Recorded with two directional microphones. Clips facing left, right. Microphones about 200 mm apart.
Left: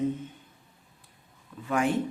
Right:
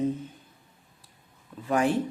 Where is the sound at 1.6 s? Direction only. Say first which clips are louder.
Right 2 dB; 35° right (ahead or behind).